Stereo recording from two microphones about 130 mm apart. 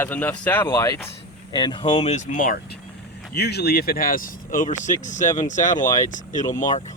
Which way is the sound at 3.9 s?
90° left.